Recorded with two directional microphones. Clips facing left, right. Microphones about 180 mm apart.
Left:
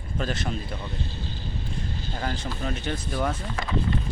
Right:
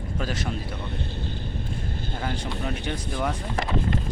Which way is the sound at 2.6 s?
15° right (ahead or behind).